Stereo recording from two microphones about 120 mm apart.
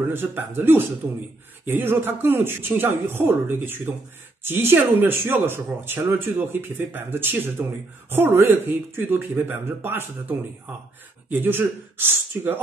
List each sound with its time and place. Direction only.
0.1 s speech: 20° right (ahead or behind)
11.3 s speech: 15° right (ahead or behind)